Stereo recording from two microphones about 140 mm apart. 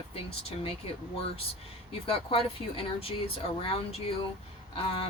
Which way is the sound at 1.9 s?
45° left (ahead or behind).